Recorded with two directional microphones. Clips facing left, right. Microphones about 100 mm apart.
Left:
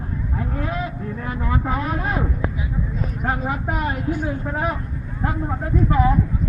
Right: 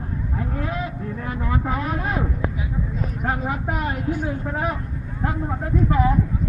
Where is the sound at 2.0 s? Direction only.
25° left (ahead or behind).